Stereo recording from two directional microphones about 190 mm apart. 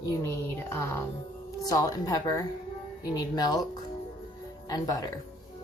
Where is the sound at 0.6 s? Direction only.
15° left (ahead or behind).